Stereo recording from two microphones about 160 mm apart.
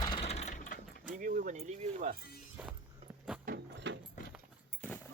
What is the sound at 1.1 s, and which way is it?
Music, 55° right (ahead or behind).